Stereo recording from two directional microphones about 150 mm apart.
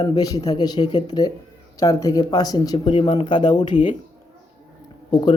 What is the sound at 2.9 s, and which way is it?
Speech, 40° left (ahead or behind).